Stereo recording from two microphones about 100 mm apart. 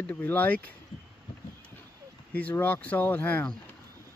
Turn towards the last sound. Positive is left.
turn(degrees=15)  # may be behind; listen again after turning